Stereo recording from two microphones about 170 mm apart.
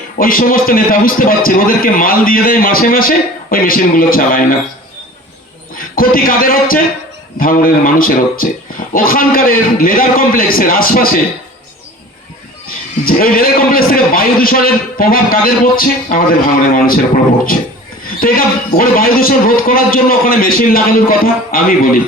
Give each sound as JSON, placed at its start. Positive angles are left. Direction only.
{"t": 0.2, "sound": "a man's voice", "side_deg": 55}
{"t": 5.7, "sound": "a man's voice", "side_deg": 55}
{"t": 12.6, "sound": "a man's voice", "side_deg": 60}
{"t": 18.2, "sound": "a man's voice", "side_deg": 55}